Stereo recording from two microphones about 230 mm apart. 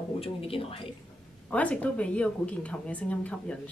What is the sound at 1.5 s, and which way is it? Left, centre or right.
Speech, centre.